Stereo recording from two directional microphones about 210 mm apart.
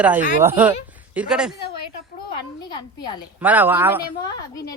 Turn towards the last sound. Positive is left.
turn(degrees=20)  # may be behind; listen again after turning